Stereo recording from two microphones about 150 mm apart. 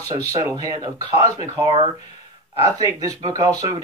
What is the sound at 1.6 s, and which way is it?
Speech, 40° right (ahead or behind).